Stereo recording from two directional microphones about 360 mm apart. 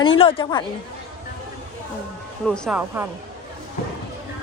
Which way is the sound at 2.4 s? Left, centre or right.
Centre.